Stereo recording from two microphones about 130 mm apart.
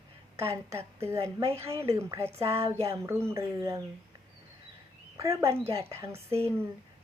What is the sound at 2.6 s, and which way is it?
Speech, 50° right (ahead or behind).